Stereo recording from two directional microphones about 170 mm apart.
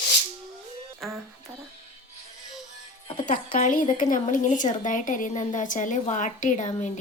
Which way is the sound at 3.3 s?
45° left (ahead or behind).